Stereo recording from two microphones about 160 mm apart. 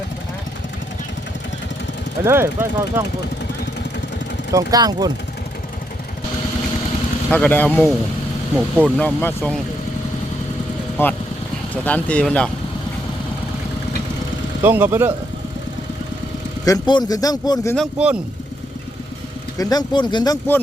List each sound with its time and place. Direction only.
2.2 s speech: 15° right (ahead or behind)
4.5 s speech: 25° right (ahead or behind)
7.3 s speech: 10° left (ahead or behind)
11.0 s speech: 15° left (ahead or behind)
14.6 s speech: 15° right (ahead or behind)
16.6 s speech: 25° left (ahead or behind)
17.7 s speech: 5° right (ahead or behind)
19.5 s speech: 25° left (ahead or behind)